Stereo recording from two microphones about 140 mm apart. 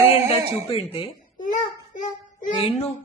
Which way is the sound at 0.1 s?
45° left (ahead or behind).